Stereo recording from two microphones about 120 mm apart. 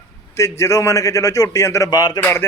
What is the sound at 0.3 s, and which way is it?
Speech, 25° left (ahead or behind).